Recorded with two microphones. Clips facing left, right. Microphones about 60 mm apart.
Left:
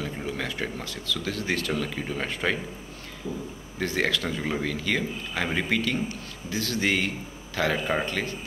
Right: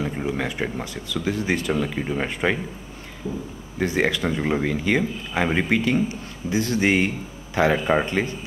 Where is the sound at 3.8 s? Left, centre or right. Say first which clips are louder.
Right 4 dB; centre.